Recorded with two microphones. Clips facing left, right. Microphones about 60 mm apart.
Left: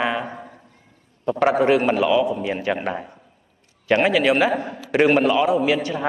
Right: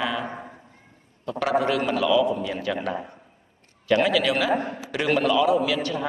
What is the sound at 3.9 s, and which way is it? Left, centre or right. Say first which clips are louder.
A man's voice: left 3 dB; left.